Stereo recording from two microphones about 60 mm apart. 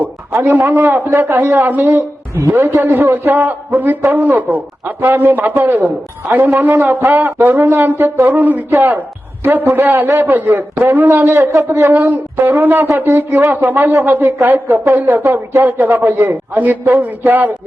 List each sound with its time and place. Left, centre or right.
0.4 s a man's voice: right
11.3 s speech: right
11.9 s a man's voice: right